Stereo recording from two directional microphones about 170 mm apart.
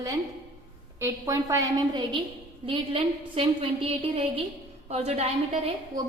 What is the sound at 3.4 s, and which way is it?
A woman's voice, 35° right (ahead or behind).